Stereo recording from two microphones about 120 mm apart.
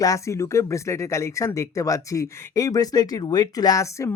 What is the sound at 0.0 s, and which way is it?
Speech, 25° left (ahead or behind).